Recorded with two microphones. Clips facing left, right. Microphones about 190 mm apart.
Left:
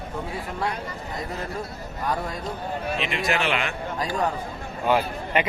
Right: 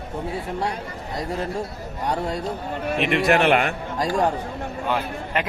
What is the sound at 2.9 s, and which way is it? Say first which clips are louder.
A man's voice: right 8 dB; 55° right (ahead or behind).